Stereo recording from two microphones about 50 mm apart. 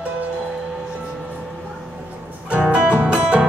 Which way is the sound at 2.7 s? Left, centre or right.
Right.